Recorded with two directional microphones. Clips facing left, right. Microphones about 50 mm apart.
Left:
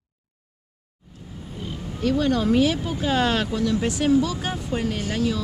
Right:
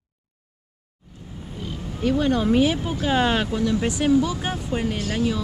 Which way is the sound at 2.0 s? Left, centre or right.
Centre.